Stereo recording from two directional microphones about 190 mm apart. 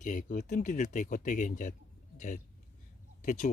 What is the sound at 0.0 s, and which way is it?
Speech, 45° left (ahead or behind).